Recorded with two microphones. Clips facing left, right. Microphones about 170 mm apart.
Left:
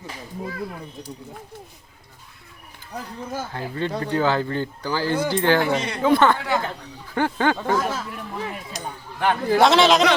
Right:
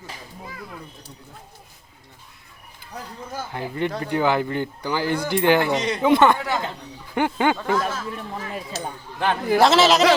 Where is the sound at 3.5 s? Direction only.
15° right (ahead or behind).